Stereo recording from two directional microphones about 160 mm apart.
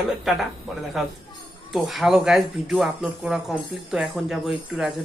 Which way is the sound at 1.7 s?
Centre (ahead or behind).